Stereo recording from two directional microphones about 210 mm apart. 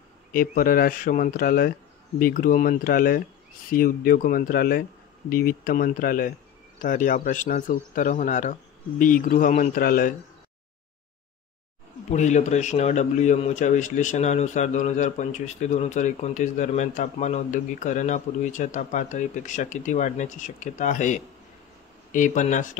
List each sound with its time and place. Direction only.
0.3 s speech: 40° left (ahead or behind)
12.1 s speech: 35° left (ahead or behind)